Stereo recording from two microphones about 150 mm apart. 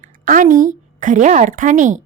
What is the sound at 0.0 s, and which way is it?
A woman's voice, 60° right (ahead or behind).